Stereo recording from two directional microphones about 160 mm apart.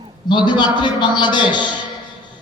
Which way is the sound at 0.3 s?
30° left (ahead or behind).